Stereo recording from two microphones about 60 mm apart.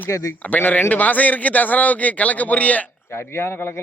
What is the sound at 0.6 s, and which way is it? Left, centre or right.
A man's voice, left.